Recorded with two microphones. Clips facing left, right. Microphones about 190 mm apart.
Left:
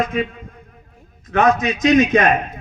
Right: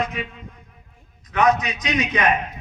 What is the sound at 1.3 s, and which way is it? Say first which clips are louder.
A man's voice: left 3 dB; 45° left (ahead or behind).